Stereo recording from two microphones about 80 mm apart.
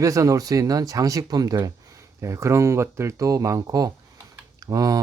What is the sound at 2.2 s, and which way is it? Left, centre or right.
Speech, right.